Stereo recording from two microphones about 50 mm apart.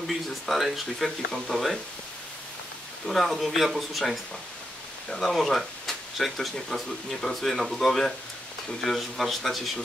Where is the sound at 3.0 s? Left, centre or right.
Centre.